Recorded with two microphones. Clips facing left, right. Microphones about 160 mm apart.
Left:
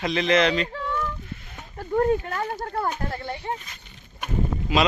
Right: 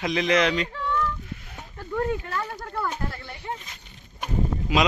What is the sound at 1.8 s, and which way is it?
Speech, 35° left (ahead or behind).